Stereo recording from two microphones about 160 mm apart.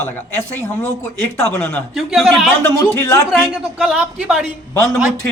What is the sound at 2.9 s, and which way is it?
Speech, 15° left (ahead or behind).